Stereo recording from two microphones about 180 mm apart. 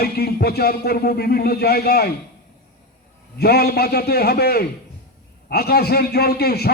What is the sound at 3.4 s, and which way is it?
A man's voice, 60° left (ahead or behind).